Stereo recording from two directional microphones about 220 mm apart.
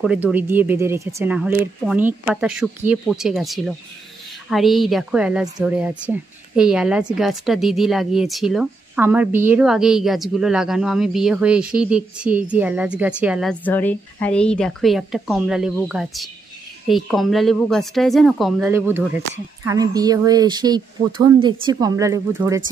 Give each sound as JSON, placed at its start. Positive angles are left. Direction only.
{"t": 0.0, "sound": "speech", "side_deg": -5}